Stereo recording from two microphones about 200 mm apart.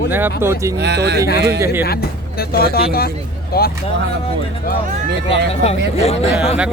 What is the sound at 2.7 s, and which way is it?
Speech, 50° left (ahead or behind).